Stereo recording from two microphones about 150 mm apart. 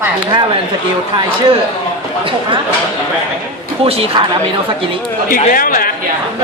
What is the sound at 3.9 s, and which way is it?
Speech, 40° right (ahead or behind).